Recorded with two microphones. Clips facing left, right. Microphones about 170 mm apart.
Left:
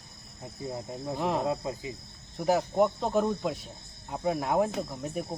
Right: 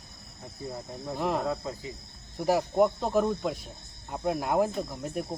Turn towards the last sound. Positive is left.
turn(degrees=0)  # may be behind; listen again after turning